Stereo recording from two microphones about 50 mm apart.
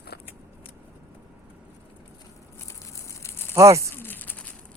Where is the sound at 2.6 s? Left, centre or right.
Left.